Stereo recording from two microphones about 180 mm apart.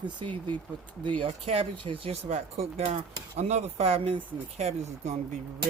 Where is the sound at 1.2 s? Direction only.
30° right (ahead or behind).